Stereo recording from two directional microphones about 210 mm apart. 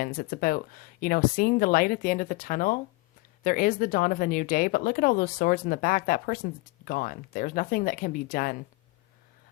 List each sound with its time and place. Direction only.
0.0 s speech: 45° left (ahead or behind)